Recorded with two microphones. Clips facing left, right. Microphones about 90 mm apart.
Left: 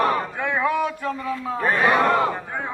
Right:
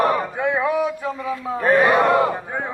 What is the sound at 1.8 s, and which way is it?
Speech, 5° right (ahead or behind).